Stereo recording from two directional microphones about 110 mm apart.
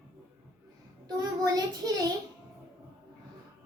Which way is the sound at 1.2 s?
35° right (ahead or behind).